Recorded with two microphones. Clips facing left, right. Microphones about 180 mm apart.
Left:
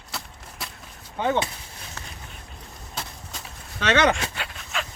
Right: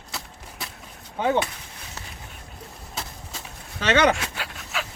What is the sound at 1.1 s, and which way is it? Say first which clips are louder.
Speech: right 1 dB; 5° right (ahead or behind).